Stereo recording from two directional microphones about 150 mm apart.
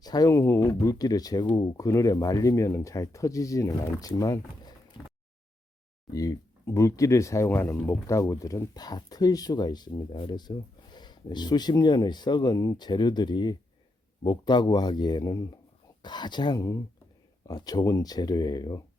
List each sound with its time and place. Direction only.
0.0 s speech: 25° left (ahead or behind)
6.1 s speech: 25° left (ahead or behind)